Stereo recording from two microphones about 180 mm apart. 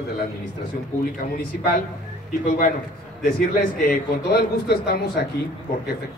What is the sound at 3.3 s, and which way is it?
A man's voice, 55° left (ahead or behind).